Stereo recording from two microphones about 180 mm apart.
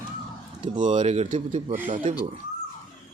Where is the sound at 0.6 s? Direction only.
45° right (ahead or behind).